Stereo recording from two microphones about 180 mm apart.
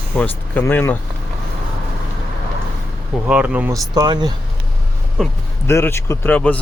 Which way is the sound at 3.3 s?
5° right (ahead or behind).